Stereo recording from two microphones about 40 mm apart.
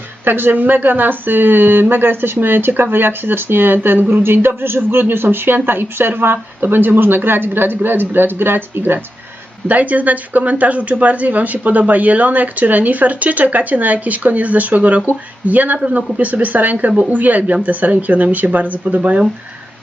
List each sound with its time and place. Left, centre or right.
0.3 s speech: right
9.6 s speech: right